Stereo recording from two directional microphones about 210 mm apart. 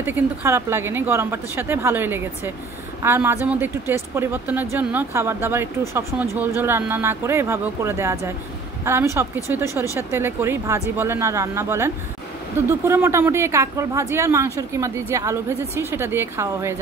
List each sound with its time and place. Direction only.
0.0 s speech: 10° right (ahead or behind)